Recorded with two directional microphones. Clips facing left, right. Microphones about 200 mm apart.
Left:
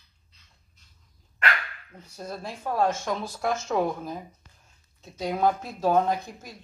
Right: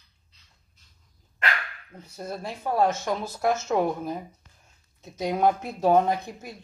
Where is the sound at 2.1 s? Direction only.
5° right (ahead or behind).